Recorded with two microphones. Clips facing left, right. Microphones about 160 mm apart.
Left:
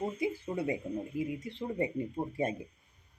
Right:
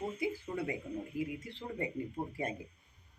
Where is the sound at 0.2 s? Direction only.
20° left (ahead or behind).